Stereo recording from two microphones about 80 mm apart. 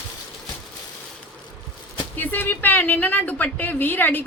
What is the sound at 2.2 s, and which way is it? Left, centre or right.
Speech, left.